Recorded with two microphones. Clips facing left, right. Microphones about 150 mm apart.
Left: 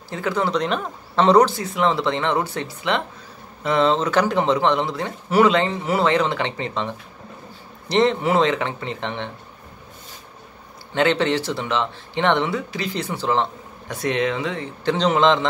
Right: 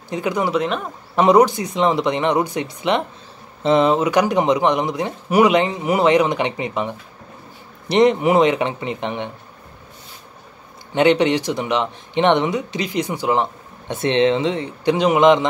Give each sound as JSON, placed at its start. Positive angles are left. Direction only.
{"t": 0.1, "sound": "speech", "side_deg": -15}
{"t": 10.9, "sound": "speech", "side_deg": -15}